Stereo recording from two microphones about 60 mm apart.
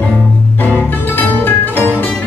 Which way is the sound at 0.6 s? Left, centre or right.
Left.